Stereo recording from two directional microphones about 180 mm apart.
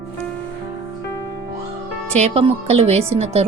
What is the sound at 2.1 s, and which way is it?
Speech, 35° right (ahead or behind).